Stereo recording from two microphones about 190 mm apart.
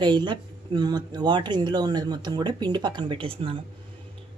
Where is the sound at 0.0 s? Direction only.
25° right (ahead or behind).